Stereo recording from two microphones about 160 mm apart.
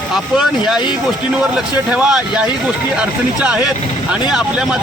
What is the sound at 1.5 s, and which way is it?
Speech, 5° right (ahead or behind).